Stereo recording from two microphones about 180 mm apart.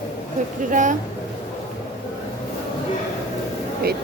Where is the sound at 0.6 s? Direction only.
45° right (ahead or behind).